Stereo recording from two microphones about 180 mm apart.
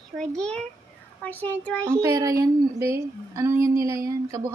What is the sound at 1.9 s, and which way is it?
Speech, 15° right (ahead or behind).